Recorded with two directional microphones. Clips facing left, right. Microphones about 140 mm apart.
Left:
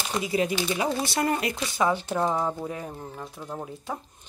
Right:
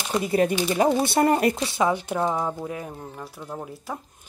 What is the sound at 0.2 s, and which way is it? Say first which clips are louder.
Speech: right 4 dB; 55° right (ahead or behind).